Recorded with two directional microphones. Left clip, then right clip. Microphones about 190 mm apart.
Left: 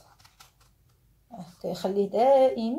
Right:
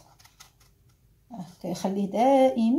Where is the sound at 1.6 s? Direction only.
15° left (ahead or behind).